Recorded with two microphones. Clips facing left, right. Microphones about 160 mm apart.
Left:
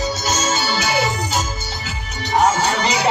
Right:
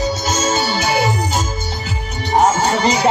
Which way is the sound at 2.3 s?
45° right (ahead or behind).